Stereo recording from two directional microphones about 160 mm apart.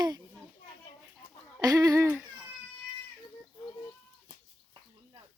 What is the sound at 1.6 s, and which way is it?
Speech, 20° right (ahead or behind).